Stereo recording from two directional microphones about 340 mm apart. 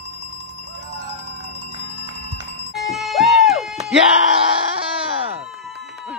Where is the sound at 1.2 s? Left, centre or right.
Centre.